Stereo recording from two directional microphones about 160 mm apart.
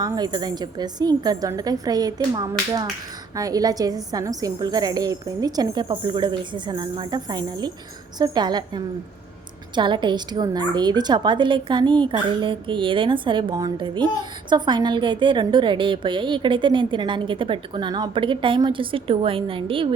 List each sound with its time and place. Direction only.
0.0 s a woman's voice: 25° right (ahead or behind)